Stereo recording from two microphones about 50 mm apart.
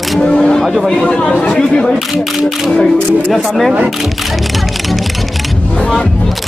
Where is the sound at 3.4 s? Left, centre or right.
Centre.